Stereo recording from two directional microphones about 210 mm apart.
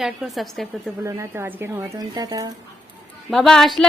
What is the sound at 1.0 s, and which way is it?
A woman's voice, 15° right (ahead or behind).